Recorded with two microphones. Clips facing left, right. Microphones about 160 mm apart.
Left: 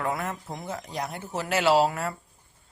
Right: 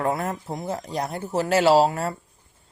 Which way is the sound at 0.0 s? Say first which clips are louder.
Right 5 dB; 35° right (ahead or behind).